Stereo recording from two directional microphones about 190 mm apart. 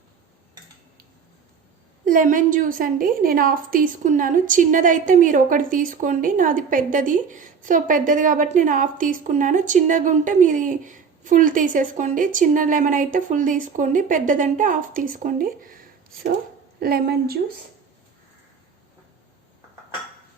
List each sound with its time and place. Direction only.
2.0 s a woman's voice: 45° right (ahead or behind)
16.8 s a woman's voice: 55° right (ahead or behind)